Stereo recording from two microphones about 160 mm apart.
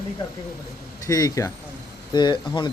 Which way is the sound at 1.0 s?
20° left (ahead or behind).